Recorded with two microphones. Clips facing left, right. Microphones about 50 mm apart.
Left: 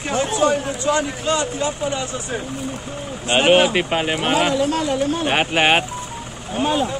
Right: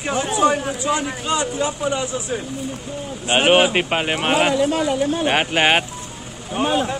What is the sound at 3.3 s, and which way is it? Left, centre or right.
Speech, centre.